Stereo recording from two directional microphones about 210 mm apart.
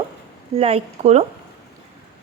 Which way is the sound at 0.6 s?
30° right (ahead or behind).